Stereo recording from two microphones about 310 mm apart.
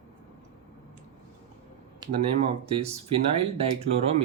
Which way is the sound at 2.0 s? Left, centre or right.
Centre.